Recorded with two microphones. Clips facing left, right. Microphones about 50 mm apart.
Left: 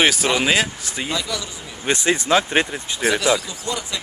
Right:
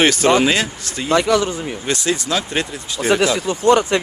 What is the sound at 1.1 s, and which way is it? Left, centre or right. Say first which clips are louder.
Speech: right 14 dB; right.